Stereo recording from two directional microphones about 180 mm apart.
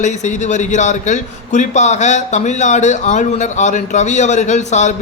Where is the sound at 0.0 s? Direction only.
40° left (ahead or behind).